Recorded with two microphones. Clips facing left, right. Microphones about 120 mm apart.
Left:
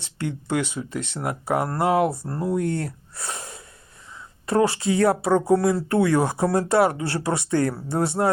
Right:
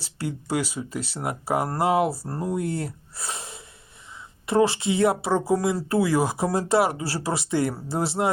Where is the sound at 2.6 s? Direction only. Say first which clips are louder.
Left 3 dB; 30° right (ahead or behind).